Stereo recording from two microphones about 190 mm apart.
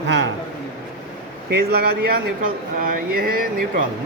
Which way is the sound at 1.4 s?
55° right (ahead or behind).